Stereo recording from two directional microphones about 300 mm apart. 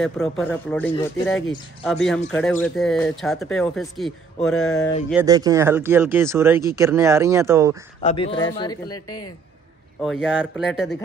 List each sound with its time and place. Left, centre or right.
0.0 s speech: centre
0.9 s speech: centre
1.9 s speech: centre
5.1 s speech: centre
8.0 s speech: left
9.9 s speech: centre